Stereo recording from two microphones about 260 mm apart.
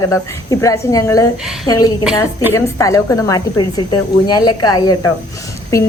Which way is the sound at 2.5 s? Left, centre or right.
Centre.